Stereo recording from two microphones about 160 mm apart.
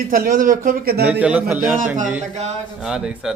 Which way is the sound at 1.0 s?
5° right (ahead or behind).